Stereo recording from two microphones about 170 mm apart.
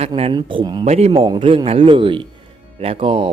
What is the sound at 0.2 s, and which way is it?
Speech, 30° right (ahead or behind).